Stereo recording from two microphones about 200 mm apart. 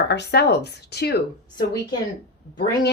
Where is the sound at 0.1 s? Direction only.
55° left (ahead or behind).